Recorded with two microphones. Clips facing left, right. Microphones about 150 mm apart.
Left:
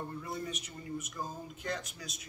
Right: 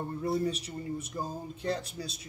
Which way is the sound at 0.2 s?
35° right (ahead or behind).